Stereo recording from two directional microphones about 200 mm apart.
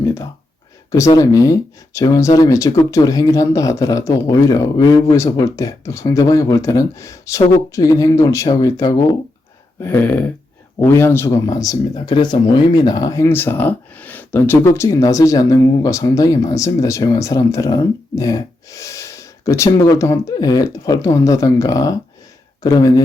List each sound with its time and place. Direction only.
0.0 s speech: 15° left (ahead or behind)